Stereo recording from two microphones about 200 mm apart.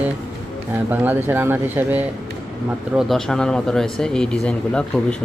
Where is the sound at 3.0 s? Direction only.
Centre (ahead or behind).